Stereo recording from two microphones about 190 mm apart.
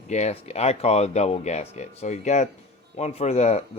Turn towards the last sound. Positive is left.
turn(degrees=35)  # may be behind; listen again after turning